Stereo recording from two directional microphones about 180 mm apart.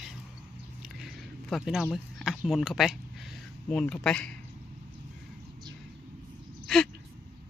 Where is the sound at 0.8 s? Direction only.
Centre (ahead or behind).